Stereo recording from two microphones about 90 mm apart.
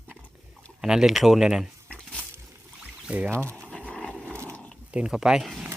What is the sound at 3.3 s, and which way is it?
Speech, 30° right (ahead or behind).